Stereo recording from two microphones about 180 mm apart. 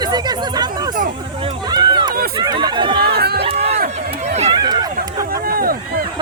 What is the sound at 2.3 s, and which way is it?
Chatter, 25° right (ahead or behind).